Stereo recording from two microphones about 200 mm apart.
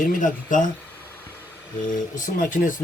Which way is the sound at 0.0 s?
40° left (ahead or behind).